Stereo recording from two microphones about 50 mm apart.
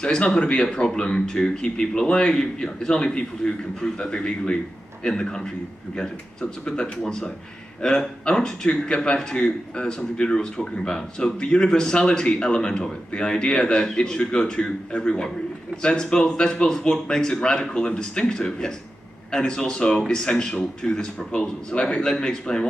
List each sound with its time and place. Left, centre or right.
0.0 s a man's voice: centre
7.0 s a man's voice: centre